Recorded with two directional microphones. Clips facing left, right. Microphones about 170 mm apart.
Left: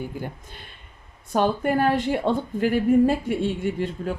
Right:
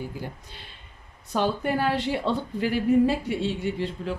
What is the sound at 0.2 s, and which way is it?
A woman's voice, 50° left (ahead or behind).